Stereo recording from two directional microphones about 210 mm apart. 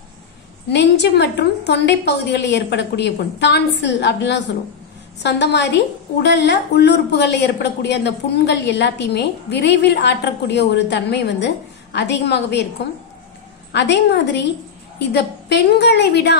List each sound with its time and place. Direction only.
0.7 s a woman's voice: 55° left (ahead or behind)
13.7 s a woman's voice: 55° left (ahead or behind)